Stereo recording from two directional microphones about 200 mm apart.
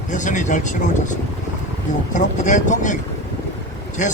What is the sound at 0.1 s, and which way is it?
A man's voice, 40° left (ahead or behind).